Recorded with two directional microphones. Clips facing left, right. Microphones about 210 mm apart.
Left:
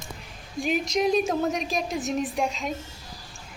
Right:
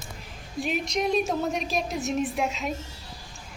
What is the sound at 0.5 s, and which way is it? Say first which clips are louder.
A woman's voice: left 3 dB; centre (ahead or behind).